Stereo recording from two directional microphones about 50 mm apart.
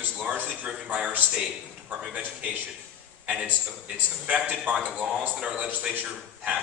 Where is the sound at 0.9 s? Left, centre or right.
Right.